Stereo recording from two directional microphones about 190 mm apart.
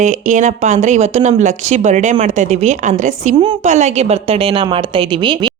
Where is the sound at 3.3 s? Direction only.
30° right (ahead or behind).